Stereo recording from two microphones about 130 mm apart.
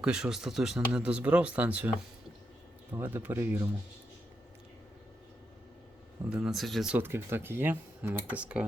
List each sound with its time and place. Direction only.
0.0 s speech: 5° right (ahead or behind)
2.9 s speech: 20° right (ahead or behind)
6.3 s speech: 5° right (ahead or behind)
6.9 s speech: 20° right (ahead or behind)